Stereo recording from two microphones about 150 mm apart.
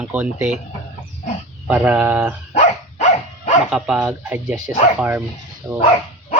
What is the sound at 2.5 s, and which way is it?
Dog, 50° left (ahead or behind).